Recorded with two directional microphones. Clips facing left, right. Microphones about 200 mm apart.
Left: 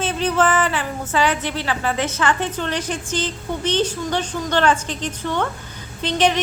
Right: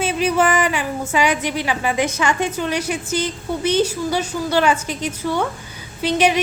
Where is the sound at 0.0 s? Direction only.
10° right (ahead or behind).